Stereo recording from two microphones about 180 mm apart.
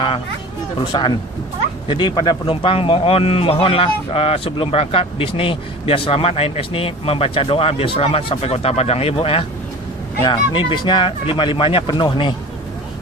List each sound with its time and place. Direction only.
0.9 s a man's voice: 25° left (ahead or behind)